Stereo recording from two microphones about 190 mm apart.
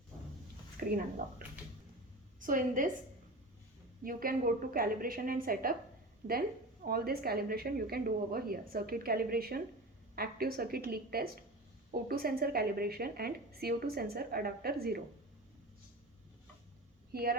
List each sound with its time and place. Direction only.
0.8 s a sound: 50° right (ahead or behind)
2.4 s speech: 45° right (ahead or behind)
4.0 s speech: 50° right (ahead or behind)
6.8 s speech: 50° right (ahead or behind)
17.1 s speech: 55° right (ahead or behind)